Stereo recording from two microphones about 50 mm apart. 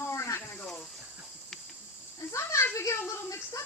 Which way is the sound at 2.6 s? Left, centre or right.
Left.